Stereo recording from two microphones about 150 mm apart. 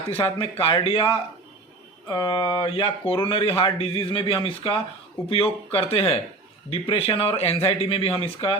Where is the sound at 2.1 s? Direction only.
30° left (ahead or behind).